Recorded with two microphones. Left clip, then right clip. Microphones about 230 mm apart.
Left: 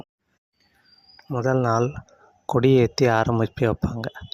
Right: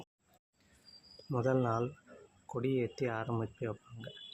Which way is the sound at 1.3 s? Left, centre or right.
Left.